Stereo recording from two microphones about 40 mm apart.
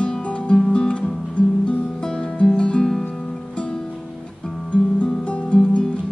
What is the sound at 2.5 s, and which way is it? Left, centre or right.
Music, left.